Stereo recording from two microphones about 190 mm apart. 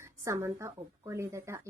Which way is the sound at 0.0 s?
15° right (ahead or behind).